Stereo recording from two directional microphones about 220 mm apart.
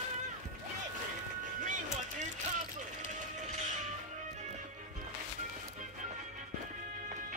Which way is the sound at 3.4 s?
30° right (ahead or behind).